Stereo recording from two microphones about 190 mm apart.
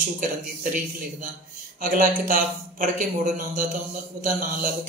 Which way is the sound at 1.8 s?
45° right (ahead or behind).